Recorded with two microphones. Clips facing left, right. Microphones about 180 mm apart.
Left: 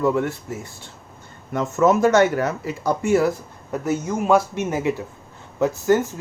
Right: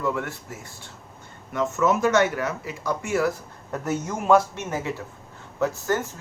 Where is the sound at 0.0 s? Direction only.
30° left (ahead or behind).